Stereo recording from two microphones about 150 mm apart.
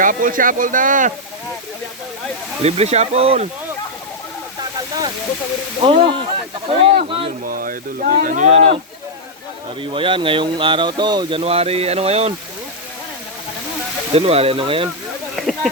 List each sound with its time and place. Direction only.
0.0 s speech: 65° right (ahead or behind)
2.6 s speech: 45° right (ahead or behind)
5.8 s speech: 40° right (ahead or behind)
7.4 s speech: 70° right (ahead or behind)
8.4 s speech: 40° right (ahead or behind)
9.8 s speech: 35° right (ahead or behind)
14.1 s speech: 40° right (ahead or behind)
15.4 s a sound: centre (ahead or behind)